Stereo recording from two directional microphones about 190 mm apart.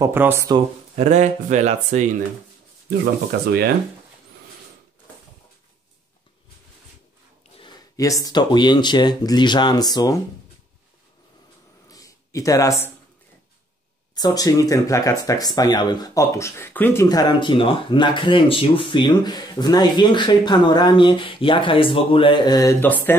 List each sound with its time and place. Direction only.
0.0 s speech: 10° right (ahead or behind)
0.9 s speech: 40° right (ahead or behind)
3.3 s speech: 55° right (ahead or behind)
7.5 s speech: 25° left (ahead or behind)
11.9 s a sound: 20° left (ahead or behind)
14.1 s speech: 20° left (ahead or behind)